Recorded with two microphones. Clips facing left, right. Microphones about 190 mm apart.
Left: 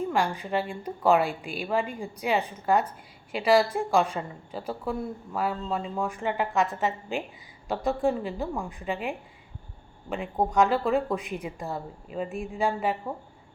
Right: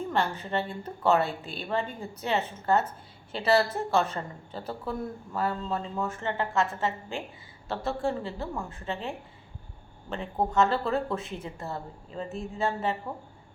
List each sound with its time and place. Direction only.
0.1 s a woman's voice: 10° left (ahead or behind)